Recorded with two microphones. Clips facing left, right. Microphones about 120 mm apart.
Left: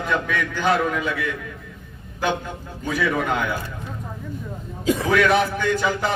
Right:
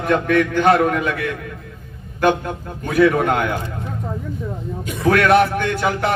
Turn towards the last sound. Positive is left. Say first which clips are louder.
# right 2 dB
turn(degrees=-60)  # may be behind; listen again after turning